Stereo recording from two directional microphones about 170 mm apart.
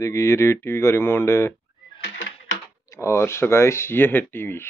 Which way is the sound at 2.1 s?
90° left.